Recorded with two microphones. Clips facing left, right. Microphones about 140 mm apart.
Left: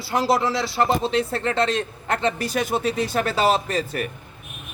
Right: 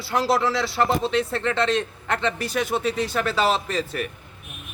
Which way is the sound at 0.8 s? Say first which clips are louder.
Left 1 dB; 5° left (ahead or behind).